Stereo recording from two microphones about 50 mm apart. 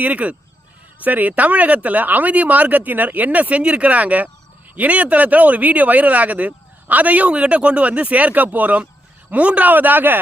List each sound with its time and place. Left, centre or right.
0.0 s speech: right